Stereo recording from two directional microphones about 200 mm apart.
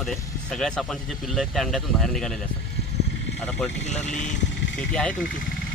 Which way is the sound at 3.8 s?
35° left (ahead or behind).